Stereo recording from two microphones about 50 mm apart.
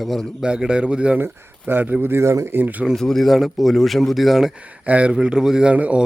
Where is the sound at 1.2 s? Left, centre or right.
Right.